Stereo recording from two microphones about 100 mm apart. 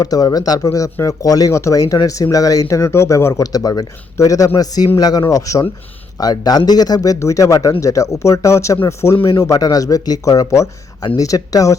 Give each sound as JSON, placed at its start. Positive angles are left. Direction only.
{"t": 0.0, "sound": "speech", "side_deg": 40}